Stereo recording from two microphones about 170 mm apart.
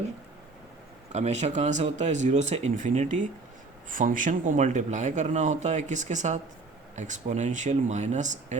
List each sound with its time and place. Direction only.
1.1 s speech: 40° right (ahead or behind)